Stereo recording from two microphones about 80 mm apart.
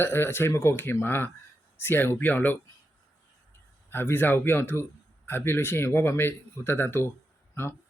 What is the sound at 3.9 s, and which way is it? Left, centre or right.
Speech, left.